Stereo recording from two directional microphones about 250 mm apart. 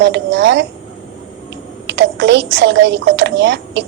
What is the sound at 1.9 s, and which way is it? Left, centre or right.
A woman's voice, right.